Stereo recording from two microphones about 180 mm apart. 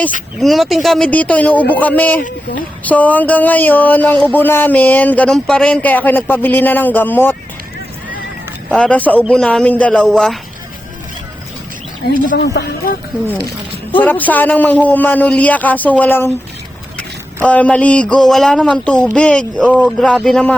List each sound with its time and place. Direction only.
0.3 s speech: centre (ahead or behind)
8.7 s a man's voice: 5° left (ahead or behind)
12.0 s speech: 65° left (ahead or behind)
14.0 s speech: 10° left (ahead or behind)
17.4 s a man's voice: 10° left (ahead or behind)